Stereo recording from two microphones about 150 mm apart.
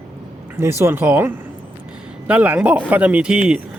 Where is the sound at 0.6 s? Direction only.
15° right (ahead or behind).